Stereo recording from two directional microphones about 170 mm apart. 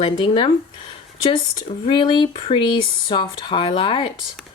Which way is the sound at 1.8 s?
25° left (ahead or behind).